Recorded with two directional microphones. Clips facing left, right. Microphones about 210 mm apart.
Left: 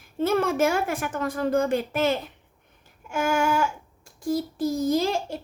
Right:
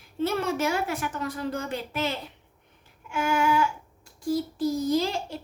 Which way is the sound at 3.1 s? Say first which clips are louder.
Left 1 dB; 45° left (ahead or behind).